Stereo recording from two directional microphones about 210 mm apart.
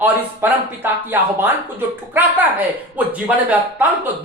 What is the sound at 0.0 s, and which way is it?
Speech, 10° right (ahead or behind).